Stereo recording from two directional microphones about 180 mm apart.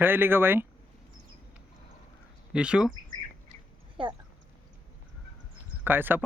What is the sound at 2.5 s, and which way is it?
Speech, 5° right (ahead or behind).